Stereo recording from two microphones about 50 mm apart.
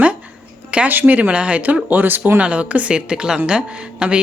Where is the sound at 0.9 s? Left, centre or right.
Right.